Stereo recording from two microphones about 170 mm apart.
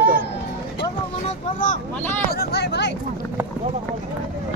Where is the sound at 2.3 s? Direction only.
75° left (ahead or behind).